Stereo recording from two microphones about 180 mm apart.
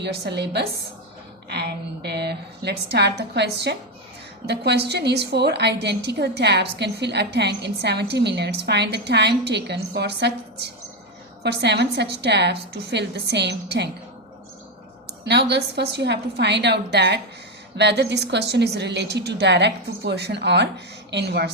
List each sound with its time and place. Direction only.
0.0 s a woman's voice: 70° right (ahead or behind)
15.2 s a woman's voice: 70° right (ahead or behind)